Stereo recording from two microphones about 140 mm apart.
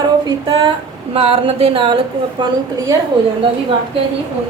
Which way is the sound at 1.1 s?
45° right (ahead or behind).